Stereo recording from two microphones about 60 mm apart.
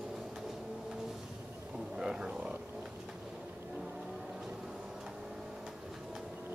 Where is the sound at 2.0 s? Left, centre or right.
Centre.